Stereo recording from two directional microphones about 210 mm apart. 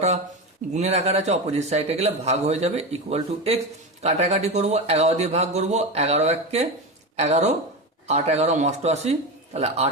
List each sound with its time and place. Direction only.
0.7 s speech: 30° right (ahead or behind)